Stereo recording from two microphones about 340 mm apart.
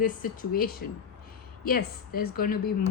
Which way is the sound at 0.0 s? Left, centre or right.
Left.